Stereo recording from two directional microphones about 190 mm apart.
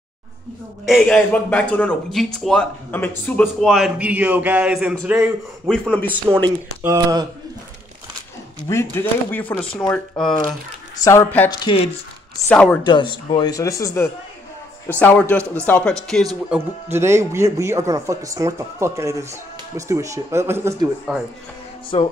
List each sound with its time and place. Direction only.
0.8 s speech: centre (ahead or behind)
5.7 s speech: 5° left (ahead or behind)
6.8 s speech: 15° right (ahead or behind)
8.5 s speech: 15° left (ahead or behind)
11.1 s speech: 15° left (ahead or behind)
12.8 s speech: 25° left (ahead or behind); by 16.0 s 5° left (ahead or behind)
16.4 s speech: 10° right (ahead or behind)
21.9 s music: 30° left (ahead or behind)